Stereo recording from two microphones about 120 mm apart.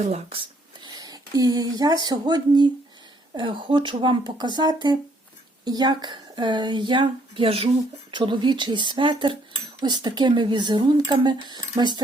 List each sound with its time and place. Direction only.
0.1 s speech: 50° right (ahead or behind)
0.9 s speech: 30° right (ahead or behind)